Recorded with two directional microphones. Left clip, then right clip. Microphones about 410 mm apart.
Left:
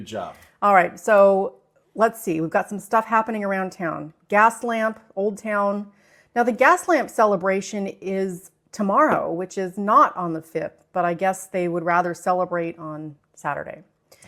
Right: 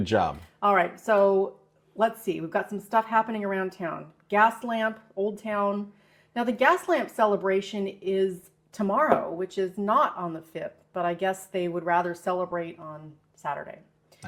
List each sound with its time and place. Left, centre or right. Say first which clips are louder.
0.6 s a woman's voice: left 6 dB; left